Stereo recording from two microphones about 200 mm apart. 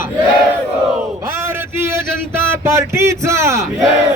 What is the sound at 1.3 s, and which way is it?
Speech, 10° right (ahead or behind).